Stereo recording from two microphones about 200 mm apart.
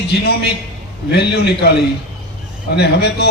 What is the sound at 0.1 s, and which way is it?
Speech, 55° left (ahead or behind).